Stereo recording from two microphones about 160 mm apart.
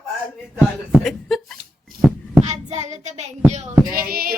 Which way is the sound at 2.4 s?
45° right (ahead or behind).